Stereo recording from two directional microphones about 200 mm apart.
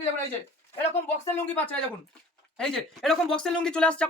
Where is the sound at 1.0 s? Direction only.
10° left (ahead or behind).